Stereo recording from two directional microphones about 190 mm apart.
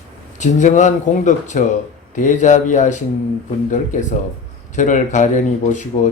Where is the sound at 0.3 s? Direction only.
40° left (ahead or behind).